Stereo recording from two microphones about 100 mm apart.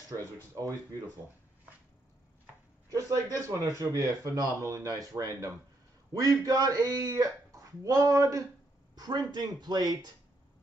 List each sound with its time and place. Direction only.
2.9 s a sound: 35° right (ahead or behind)
3.4 s speech: 35° right (ahead or behind)
8.9 s speech: 45° right (ahead or behind)